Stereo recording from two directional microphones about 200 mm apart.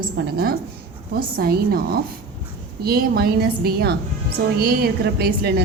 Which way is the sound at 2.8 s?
50° right (ahead or behind).